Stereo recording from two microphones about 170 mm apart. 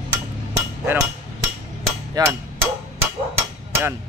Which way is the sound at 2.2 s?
20° right (ahead or behind).